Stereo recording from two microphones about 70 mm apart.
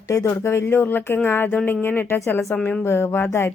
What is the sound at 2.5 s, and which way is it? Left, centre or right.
Speech, centre.